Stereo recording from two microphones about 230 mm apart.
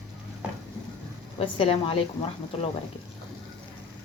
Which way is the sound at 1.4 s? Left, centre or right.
Left.